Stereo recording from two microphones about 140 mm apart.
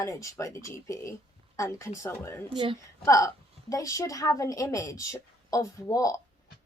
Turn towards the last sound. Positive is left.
turn(degrees=25)  # may be behind; listen again after turning